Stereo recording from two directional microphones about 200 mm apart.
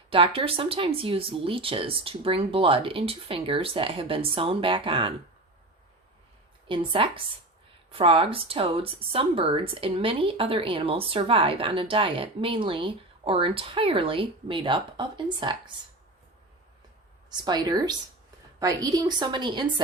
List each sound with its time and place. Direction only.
0.1 s speech: 25° right (ahead or behind)
6.7 s speech: 25° right (ahead or behind)
17.3 s speech: 20° right (ahead or behind)